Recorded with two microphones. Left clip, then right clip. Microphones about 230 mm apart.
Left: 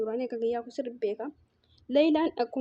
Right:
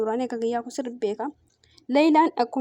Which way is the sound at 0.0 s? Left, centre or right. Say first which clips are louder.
Right 4 dB; right.